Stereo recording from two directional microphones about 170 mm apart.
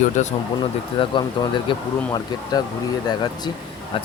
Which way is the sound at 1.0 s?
30° left (ahead or behind).